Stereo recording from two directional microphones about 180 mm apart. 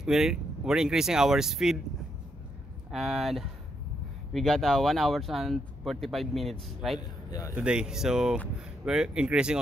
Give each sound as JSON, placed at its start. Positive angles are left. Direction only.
{"t": 0.0, "sound": "speech", "side_deg": 0}
{"t": 2.9, "sound": "speech", "side_deg": 0}
{"t": 7.0, "sound": "speech", "side_deg": 20}
{"t": 7.5, "sound": "speech", "side_deg": -5}